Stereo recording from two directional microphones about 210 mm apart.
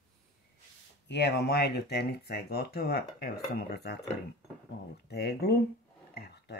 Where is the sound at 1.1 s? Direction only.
50° left (ahead or behind).